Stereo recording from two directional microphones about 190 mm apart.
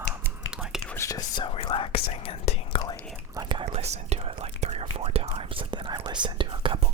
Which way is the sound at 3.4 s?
25° right (ahead or behind).